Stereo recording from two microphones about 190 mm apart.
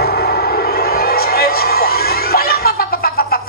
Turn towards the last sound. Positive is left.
turn(degrees=50)  # may be behind; listen again after turning